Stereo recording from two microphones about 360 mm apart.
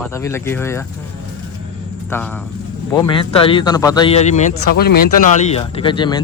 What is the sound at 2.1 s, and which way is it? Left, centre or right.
Speech, centre.